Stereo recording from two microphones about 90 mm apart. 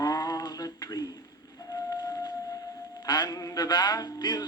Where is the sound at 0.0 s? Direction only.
40° left (ahead or behind).